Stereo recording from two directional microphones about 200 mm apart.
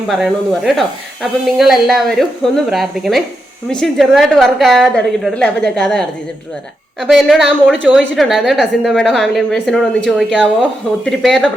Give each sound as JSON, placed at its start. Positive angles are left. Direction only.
{"t": 0.1, "sound": "speech", "side_deg": 0}